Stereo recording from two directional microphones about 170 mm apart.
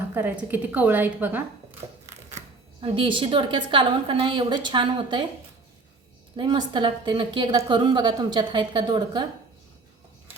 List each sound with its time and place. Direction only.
0.1 s a woman's voice: 10° right (ahead or behind)
2.8 s a woman's voice: 30° right (ahead or behind)
6.3 s a woman's voice: 30° right (ahead or behind)